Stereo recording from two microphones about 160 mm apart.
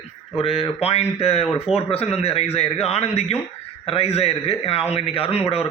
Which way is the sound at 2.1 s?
40° left (ahead or behind).